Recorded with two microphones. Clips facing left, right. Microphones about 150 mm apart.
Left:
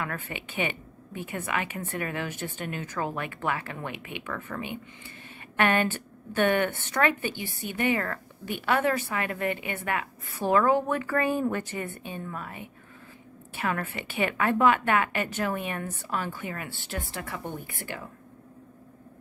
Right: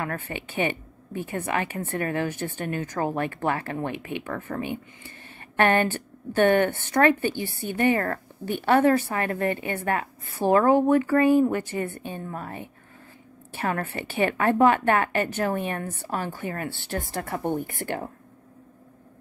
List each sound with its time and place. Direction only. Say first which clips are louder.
0.3 s a woman's voice: right 4 dB; 30° right (ahead or behind)
0.7 s a sound: right 5 dB; 20° left (ahead or behind)
1.3 s a woman's voice: right 3 dB; 35° right (ahead or behind)
2.5 s a woman's voice: right 5 dB; 20° left (ahead or behind)
3.2 s a woman's voice: right 5 dB; 40° right (ahead or behind)
5.6 s a woman's voice: right 3 dB; 35° right (ahead or behind)
7.2 s speech: right 6 dB; 15° left (ahead or behind)
7.7 s a woman's voice: right 5 dB; 40° right (ahead or behind); by 11.6 s 20° right (ahead or behind)
11.8 s a woman's voice: right 5 dB; 20° left (ahead or behind)
12.3 s a woman's voice: right 3 dB; 35° right (ahead or behind)